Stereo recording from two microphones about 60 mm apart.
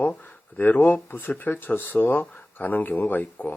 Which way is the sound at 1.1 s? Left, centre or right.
Left.